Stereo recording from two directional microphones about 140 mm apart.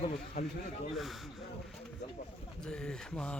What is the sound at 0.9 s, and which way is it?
Speech, centre (ahead or behind).